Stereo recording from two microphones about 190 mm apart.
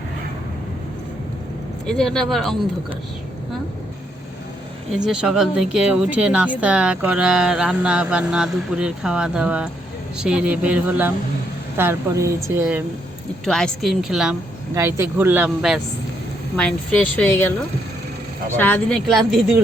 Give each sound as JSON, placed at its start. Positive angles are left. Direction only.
{"t": 1.9, "sound": "speech", "side_deg": 5}
{"t": 4.9, "sound": "speech", "side_deg": -5}
{"t": 13.4, "sound": "speech", "side_deg": 0}
{"t": 14.8, "sound": "speech", "side_deg": -15}
{"t": 18.5, "sound": "speech", "side_deg": 10}